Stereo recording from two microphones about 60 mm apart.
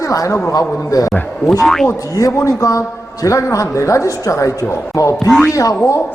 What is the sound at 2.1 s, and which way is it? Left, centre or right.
A man's voice, left.